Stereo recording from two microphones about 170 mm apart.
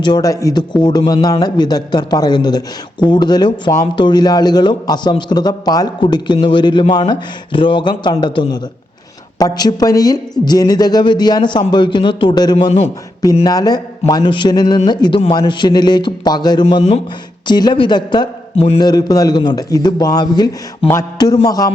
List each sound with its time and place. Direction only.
0.0 s a man's voice: 25° left (ahead or behind)
13.4 s a man's voice: 25° left (ahead or behind)
18.8 s a man's voice: 25° left (ahead or behind)